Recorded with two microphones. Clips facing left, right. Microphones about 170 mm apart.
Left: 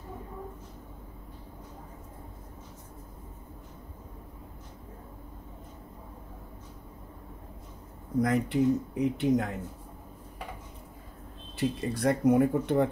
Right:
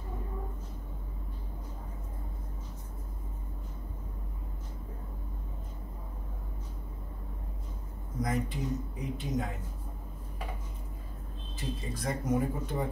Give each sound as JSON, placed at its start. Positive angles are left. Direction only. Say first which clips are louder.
{"t": 8.2, "sound": "speech", "louder": "left 8 dB", "side_deg": 65}
{"t": 11.5, "sound": "speech", "louder": "left 8 dB", "side_deg": 65}